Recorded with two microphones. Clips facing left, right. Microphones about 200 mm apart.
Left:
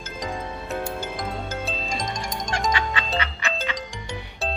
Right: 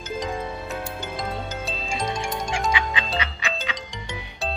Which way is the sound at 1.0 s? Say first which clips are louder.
Even; centre (ahead or behind).